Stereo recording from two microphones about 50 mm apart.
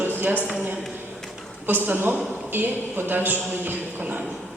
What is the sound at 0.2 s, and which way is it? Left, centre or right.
Speech, right.